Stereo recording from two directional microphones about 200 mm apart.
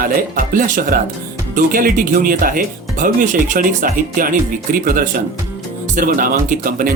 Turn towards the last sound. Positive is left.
turn(degrees=-45)  # may be behind; listen again after turning